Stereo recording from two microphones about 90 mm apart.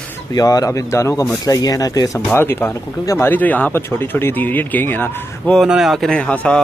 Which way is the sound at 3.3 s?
20° left (ahead or behind).